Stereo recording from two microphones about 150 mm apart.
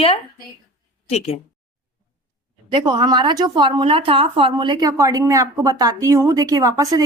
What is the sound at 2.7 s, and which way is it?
A woman's voice, 30° right (ahead or behind).